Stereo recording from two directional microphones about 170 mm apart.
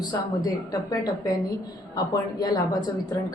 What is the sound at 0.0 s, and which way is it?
A woman's voice, 20° left (ahead or behind).